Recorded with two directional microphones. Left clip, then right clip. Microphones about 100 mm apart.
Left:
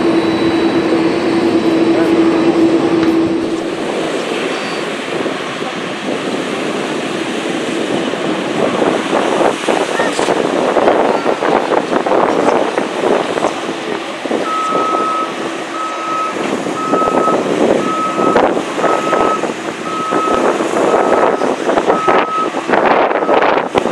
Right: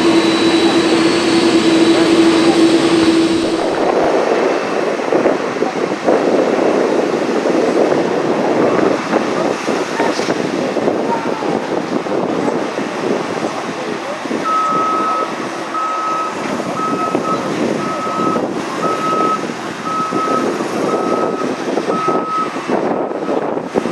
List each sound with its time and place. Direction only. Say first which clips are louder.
0.0 s vehicle: right 1 dB; 60° right (ahead or behind)
22.9 s wind noise: left 7 dB; 35° left (ahead or behind)